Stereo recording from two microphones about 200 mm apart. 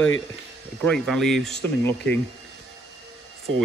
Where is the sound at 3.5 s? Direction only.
75° right (ahead or behind).